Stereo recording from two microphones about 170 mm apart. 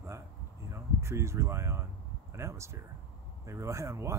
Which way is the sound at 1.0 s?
15° right (ahead or behind).